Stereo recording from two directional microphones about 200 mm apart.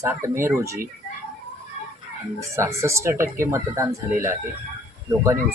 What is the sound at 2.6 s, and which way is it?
Speech, 15° right (ahead or behind).